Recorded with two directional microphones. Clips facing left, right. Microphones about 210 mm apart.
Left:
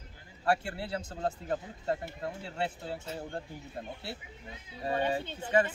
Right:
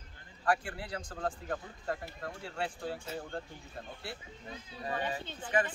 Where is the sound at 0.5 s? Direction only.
25° left (ahead or behind).